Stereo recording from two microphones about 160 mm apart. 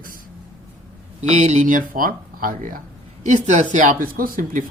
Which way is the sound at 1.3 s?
45° right (ahead or behind).